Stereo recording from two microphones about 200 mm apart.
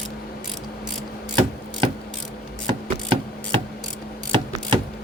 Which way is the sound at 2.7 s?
25° right (ahead or behind).